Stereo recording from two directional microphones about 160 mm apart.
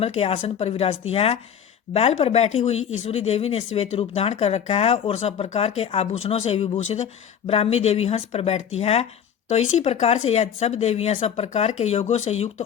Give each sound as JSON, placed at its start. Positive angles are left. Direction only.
{"t": 0.0, "sound": "speech", "side_deg": 40}